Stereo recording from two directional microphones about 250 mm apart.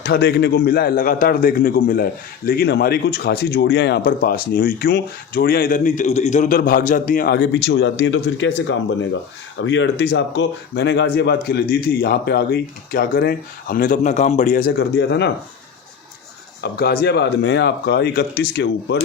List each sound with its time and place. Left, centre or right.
0.0 s speech: left
16.6 s speech: left